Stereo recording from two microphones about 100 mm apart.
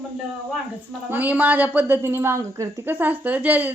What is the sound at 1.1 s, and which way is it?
A woman's voice, 15° right (ahead or behind).